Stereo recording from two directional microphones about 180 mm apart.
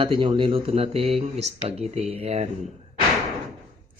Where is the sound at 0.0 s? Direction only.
30° right (ahead or behind).